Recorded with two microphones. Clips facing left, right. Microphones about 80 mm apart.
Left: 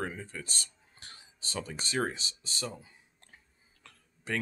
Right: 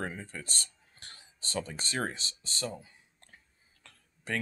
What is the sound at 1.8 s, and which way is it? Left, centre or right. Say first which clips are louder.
Speech: left 2 dB; centre.